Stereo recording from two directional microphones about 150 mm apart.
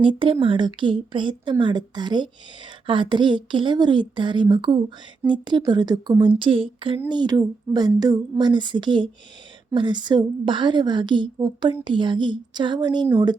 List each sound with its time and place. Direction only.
0.0 s a woman's voice: 35° right (ahead or behind)